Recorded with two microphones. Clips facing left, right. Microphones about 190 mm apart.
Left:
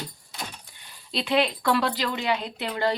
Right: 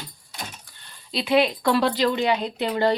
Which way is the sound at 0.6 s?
10° left (ahead or behind).